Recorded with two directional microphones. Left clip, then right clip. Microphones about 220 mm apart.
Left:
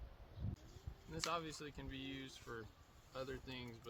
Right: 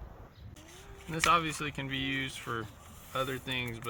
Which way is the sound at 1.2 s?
10° left (ahead or behind).